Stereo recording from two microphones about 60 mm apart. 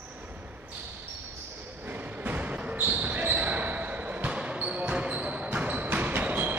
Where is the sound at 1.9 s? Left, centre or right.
Right.